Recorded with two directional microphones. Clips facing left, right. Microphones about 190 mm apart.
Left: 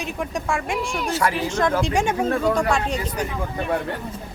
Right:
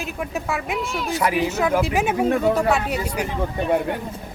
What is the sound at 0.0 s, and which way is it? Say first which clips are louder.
Speech: even; 5° right (ahead or behind).